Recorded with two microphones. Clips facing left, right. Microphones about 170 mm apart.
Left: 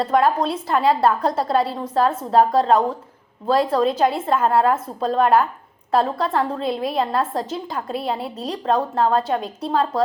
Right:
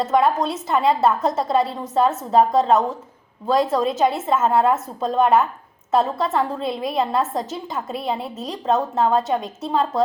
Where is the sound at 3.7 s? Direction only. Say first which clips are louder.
Left 1 dB; 5° right (ahead or behind).